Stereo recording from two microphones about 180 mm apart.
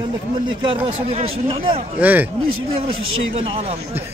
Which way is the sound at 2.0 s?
10° right (ahead or behind).